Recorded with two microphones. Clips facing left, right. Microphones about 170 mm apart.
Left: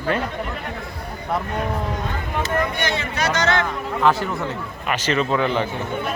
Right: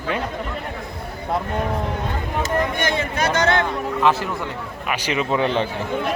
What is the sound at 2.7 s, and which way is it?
Speech, 50° right (ahead or behind).